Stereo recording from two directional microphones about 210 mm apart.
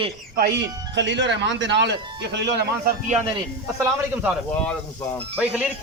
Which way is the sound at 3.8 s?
10° right (ahead or behind).